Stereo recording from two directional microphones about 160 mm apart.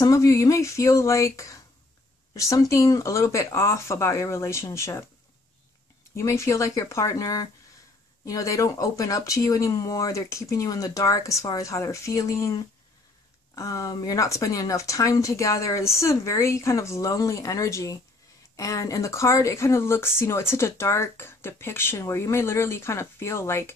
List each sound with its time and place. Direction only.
0.0 s speech: 20° left (ahead or behind)
6.1 s speech: 15° left (ahead or behind)